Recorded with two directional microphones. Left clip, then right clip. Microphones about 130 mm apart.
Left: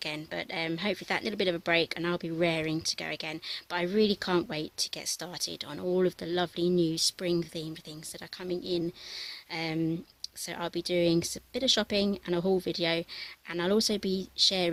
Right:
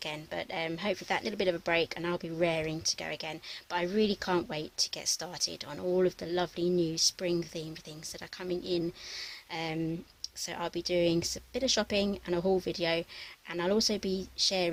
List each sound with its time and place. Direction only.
0.0 s speech: 30° left (ahead or behind)
8.4 s speech: 10° left (ahead or behind)
9.5 s speech: 20° left (ahead or behind)